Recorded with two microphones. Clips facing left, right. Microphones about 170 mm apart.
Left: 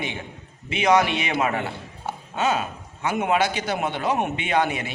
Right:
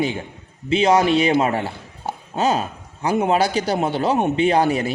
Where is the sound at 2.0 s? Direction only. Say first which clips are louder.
Right 4 dB; 35° right (ahead or behind).